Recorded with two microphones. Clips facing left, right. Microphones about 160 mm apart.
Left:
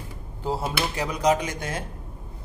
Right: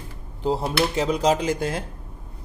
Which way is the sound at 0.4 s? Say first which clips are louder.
Right 5 dB; 20° right (ahead or behind).